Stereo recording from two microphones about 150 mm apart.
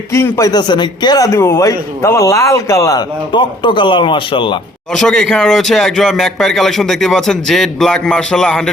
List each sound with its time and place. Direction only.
0.1 s speech: 20° left (ahead or behind)
4.9 s speech: 5° left (ahead or behind)